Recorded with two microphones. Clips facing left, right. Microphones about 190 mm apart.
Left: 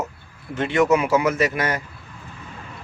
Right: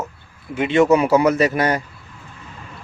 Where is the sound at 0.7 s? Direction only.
25° right (ahead or behind).